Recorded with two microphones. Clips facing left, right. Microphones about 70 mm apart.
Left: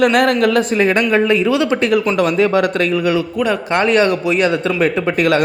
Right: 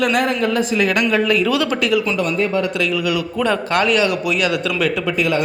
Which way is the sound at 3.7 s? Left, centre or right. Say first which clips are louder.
Left 5 dB; left.